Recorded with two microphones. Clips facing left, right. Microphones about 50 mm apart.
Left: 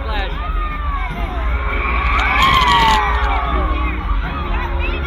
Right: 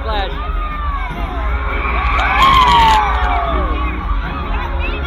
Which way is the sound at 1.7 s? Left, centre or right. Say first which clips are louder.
Right 1 dB; centre.